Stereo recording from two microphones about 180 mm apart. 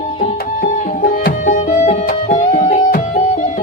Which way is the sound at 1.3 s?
50° left (ahead or behind).